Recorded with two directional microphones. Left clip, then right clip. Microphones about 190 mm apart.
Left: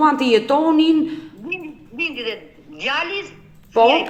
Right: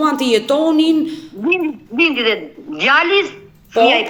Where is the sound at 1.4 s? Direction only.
30° right (ahead or behind).